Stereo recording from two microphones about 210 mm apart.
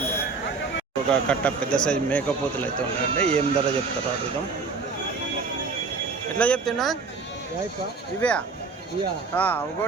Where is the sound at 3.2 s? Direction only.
30° right (ahead or behind).